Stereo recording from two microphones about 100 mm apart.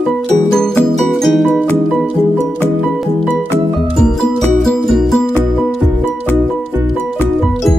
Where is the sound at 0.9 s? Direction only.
Centre (ahead or behind).